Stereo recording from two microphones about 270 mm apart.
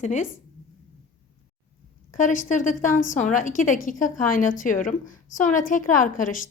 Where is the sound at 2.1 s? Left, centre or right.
Left.